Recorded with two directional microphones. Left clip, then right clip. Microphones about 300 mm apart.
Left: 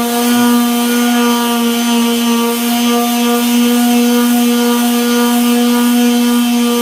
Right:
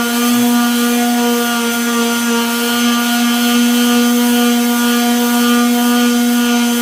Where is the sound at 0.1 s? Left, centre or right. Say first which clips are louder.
Left 2 dB; centre.